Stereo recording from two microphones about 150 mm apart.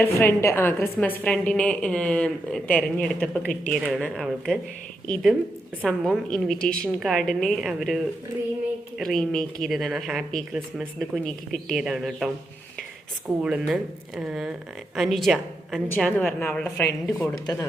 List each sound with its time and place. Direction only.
0.0 s a woman's voice: 15° left (ahead or behind)
17.4 s speech: 25° left (ahead or behind)